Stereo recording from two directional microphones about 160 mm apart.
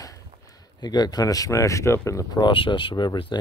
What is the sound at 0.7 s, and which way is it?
Speech, 25° left (ahead or behind).